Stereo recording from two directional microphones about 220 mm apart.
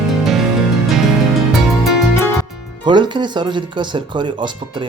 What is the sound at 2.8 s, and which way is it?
Speech, 20° right (ahead or behind).